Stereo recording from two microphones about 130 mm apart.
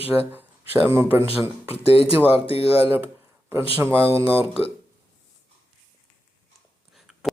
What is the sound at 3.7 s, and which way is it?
Speech, 15° right (ahead or behind).